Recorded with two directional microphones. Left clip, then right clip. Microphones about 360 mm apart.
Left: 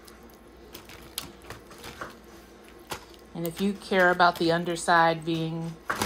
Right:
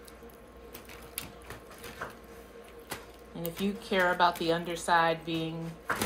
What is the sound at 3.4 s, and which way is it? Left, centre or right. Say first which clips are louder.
Speech: left 4 dB; left.